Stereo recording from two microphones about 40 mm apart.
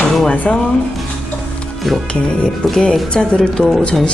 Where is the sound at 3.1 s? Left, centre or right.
Left.